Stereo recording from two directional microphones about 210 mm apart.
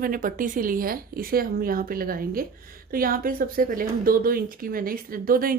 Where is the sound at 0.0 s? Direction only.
40° right (ahead or behind).